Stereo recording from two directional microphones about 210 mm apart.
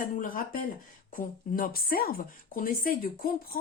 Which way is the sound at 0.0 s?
40° left (ahead or behind).